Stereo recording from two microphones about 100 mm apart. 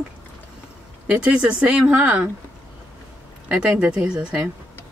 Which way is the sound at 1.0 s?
15° right (ahead or behind).